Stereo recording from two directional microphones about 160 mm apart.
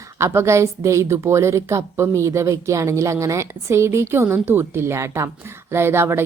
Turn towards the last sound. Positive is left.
turn(degrees=-15)  # may be behind; listen again after turning